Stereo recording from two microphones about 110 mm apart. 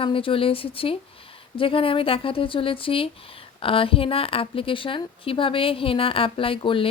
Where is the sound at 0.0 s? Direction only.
55° left (ahead or behind).